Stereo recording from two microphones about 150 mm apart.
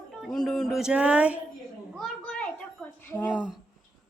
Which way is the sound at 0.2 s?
Centre (ahead or behind).